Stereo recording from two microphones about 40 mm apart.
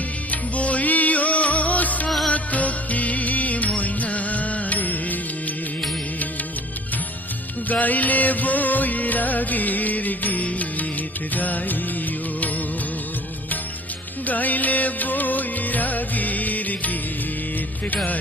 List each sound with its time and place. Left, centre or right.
0.3 s music: left
7.6 s music: left
14.2 s music: left
17.9 s speech: left